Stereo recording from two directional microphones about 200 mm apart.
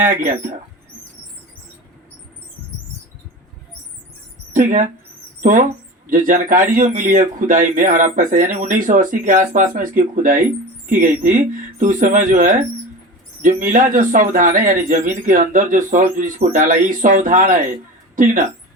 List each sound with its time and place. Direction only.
0.0 s speech: 40° right (ahead or behind)
4.5 s speech: 40° right (ahead or behind)